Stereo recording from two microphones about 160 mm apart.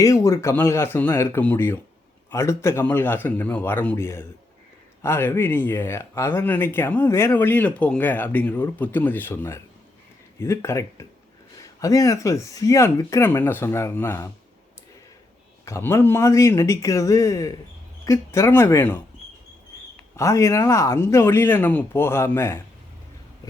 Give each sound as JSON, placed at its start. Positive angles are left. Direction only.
{"t": 0.0, "sound": "speech", "side_deg": 20}
{"t": 15.6, "sound": "speech", "side_deg": 15}
{"t": 20.1, "sound": "speech", "side_deg": 20}